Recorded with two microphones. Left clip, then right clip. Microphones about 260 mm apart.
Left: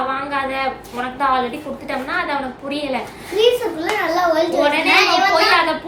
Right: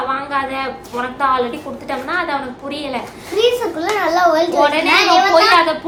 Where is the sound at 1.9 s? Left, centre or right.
Centre.